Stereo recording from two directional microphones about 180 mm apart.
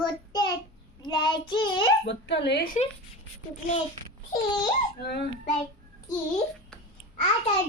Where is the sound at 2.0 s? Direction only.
75° left (ahead or behind).